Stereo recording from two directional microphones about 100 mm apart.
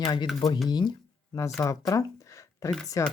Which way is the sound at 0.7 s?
45° left (ahead or behind).